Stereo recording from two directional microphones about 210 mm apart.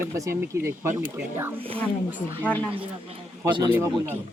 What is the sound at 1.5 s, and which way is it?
Speech, 25° right (ahead or behind).